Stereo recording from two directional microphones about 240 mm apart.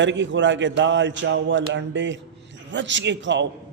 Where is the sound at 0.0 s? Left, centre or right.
Right.